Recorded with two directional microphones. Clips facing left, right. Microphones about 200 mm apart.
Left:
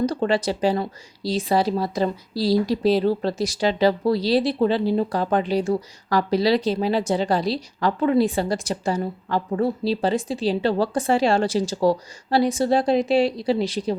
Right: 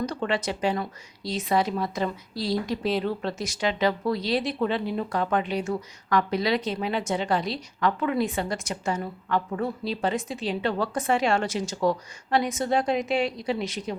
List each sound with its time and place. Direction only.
0.0 s speech: 35° left (ahead or behind)